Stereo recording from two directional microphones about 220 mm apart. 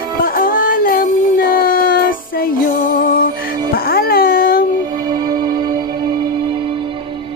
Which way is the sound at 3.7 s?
45° left (ahead or behind).